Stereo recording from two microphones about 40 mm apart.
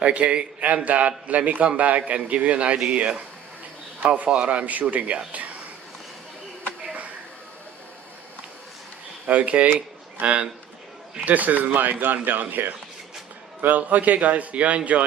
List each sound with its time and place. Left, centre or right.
0.0 s speech: right
4.0 s speech: right
9.2 s speech: right
10.2 s speech: right
11.3 s speech: right